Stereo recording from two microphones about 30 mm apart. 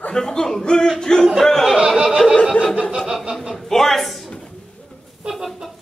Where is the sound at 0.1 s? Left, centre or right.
Left.